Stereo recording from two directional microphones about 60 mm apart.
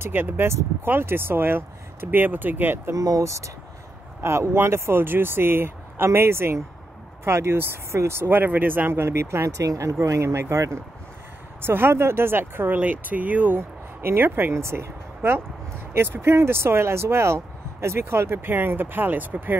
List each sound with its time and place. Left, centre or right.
0.0 s speech: right
2.9 s speech: right
4.2 s speech: right
9.6 s speech: right
11.6 s speech: right
13.6 s speech: right
14.5 s speech: right